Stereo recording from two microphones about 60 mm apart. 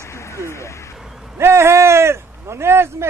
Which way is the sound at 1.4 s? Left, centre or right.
Right.